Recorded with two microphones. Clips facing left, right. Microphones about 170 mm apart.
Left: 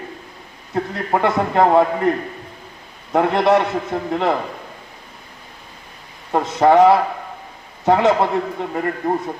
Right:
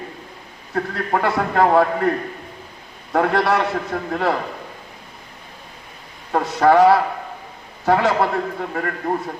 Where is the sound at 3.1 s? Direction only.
20° left (ahead or behind).